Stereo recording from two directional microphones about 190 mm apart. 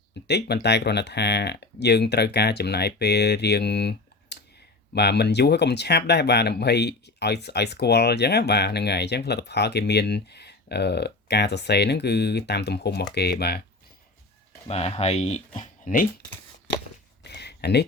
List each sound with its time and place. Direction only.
0.3 s speech: 60° left (ahead or behind)
14.7 s speech: 30° left (ahead or behind)
17.2 s a sound: 60° left (ahead or behind)